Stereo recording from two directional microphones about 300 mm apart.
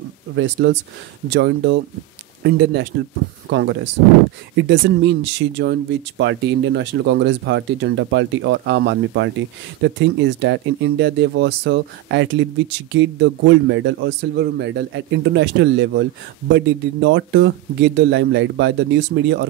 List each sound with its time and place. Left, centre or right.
0.6 s speech: right